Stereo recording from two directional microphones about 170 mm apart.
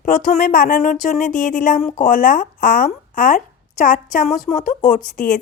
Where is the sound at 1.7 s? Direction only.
35° left (ahead or behind).